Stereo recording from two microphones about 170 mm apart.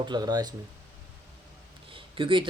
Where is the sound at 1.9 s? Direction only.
30° right (ahead or behind).